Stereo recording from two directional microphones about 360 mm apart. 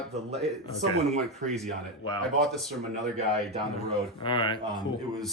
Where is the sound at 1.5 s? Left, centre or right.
Centre.